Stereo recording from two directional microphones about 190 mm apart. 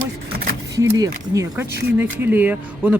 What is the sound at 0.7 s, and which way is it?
Speech, 15° right (ahead or behind).